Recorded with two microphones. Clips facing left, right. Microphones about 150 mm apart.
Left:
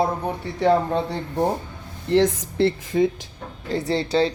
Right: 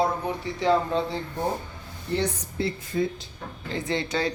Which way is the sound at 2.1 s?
80° left.